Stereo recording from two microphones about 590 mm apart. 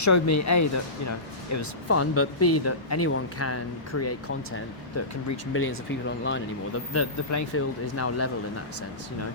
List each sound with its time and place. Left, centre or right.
0.0 s speech: left
6.2 s speech: left